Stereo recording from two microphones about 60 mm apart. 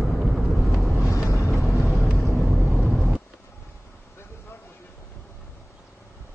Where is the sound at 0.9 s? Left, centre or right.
Left.